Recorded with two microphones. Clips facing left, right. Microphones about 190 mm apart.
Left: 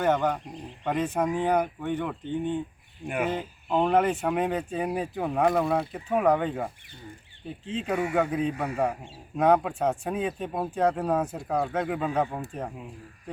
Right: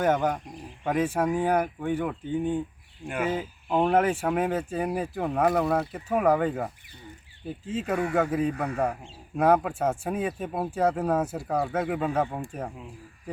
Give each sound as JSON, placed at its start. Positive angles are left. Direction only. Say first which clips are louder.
{"t": 0.0, "sound": "speech", "louder": "even", "side_deg": -10}
{"t": 7.9, "sound": "a man's voice", "louder": "even", "side_deg": 10}
{"t": 8.1, "sound": "speech", "louder": "right 1 dB", "side_deg": -5}
{"t": 8.5, "sound": "a man's voice", "louder": "even", "side_deg": 5}
{"t": 9.4, "sound": "speech", "louder": "even", "side_deg": -5}